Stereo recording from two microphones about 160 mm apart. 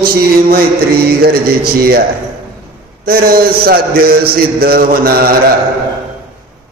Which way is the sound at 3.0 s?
70° right (ahead or behind).